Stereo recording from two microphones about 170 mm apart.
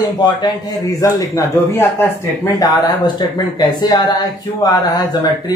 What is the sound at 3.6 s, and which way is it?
A man's voice, 25° left (ahead or behind).